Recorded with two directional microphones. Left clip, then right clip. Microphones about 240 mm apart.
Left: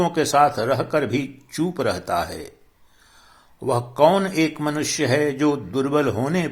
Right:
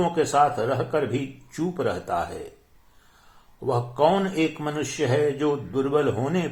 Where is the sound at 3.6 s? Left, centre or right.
Left.